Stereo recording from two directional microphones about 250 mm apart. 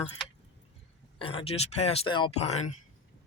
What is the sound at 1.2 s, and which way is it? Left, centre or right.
Speech, left.